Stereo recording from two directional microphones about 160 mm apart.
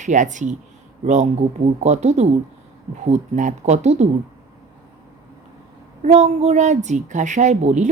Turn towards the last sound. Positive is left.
turn(degrees=-50)  # may be behind; listen again after turning